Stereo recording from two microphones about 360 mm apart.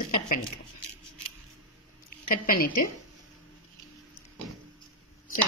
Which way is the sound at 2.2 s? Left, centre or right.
Left.